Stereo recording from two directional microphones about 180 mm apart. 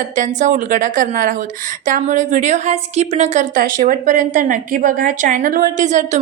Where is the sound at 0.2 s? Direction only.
45° right (ahead or behind).